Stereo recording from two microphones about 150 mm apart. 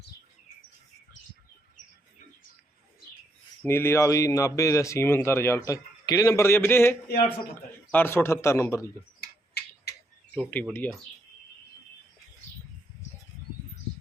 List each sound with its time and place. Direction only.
3.6 s speech: 15° left (ahead or behind)
7.9 s a man's voice: 15° left (ahead or behind)
10.3 s a man's voice: 10° left (ahead or behind)